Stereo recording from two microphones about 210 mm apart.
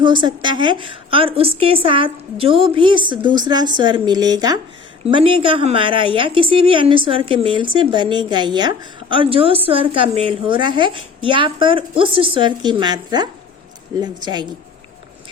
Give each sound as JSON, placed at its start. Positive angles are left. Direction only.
{"t": 0.0, "sound": "a woman's voice", "side_deg": -20}